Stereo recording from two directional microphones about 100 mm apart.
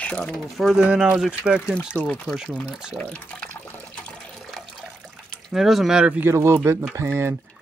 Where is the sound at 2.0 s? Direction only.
10° left (ahead or behind).